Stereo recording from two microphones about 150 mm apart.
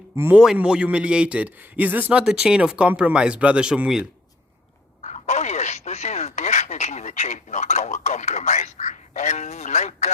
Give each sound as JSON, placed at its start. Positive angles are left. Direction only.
{"t": 0.2, "sound": "a man's voice", "side_deg": -15}
{"t": 5.0, "sound": "speech", "side_deg": 50}